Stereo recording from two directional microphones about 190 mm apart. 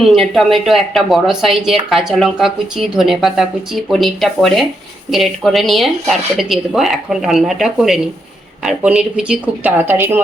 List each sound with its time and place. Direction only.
0.0 s speech: centre (ahead or behind)